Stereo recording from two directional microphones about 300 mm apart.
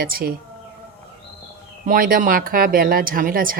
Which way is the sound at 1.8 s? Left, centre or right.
Right.